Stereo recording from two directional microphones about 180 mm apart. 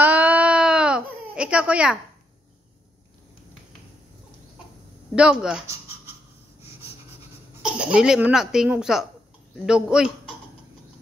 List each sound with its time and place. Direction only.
0.0 s baby cry: 10° right (ahead or behind)
5.1 s speech: 5° right (ahead or behind)
5.7 s a sound: 15° right (ahead or behind)
7.6 s speech: 5° right (ahead or behind)